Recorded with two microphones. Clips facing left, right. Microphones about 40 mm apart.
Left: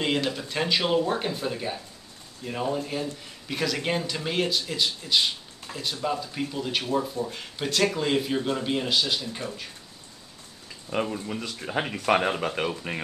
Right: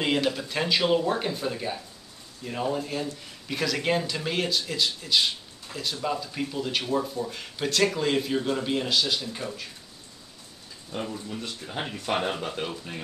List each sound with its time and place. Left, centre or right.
0.0 s speech: centre
11.2 s speech: left
12.1 s speech: left
12.4 s speech: left